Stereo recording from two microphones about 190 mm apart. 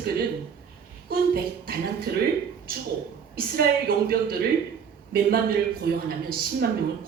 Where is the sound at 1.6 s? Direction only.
55° right (ahead or behind).